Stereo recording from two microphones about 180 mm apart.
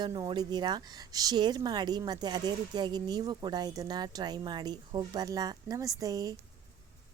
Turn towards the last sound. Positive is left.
turn(degrees=-20)  # may be behind; listen again after turning